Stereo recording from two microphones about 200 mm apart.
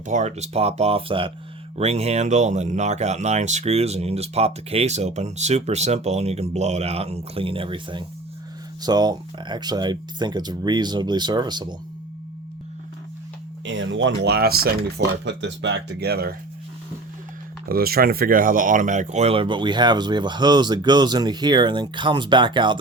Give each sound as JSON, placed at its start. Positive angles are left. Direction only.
{"t": 0.1, "sound": "speech", "side_deg": -35}
{"t": 13.7, "sound": "speech", "side_deg": -70}
{"t": 17.7, "sound": "speech", "side_deg": -50}